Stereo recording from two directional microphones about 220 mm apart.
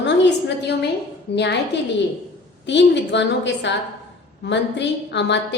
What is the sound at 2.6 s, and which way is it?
A woman's voice, 55° left (ahead or behind).